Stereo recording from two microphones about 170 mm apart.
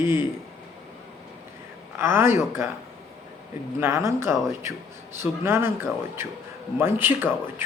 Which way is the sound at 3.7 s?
15° right (ahead or behind).